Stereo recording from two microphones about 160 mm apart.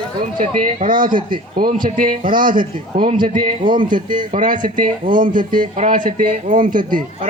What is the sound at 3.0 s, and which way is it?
A man's voice, 30° right (ahead or behind).